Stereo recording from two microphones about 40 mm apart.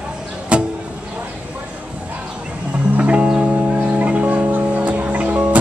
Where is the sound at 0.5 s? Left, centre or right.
Right.